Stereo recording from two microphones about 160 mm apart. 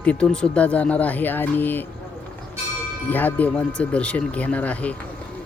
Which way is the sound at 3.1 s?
10° left (ahead or behind).